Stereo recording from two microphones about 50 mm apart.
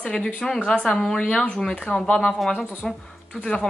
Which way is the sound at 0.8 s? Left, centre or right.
Centre.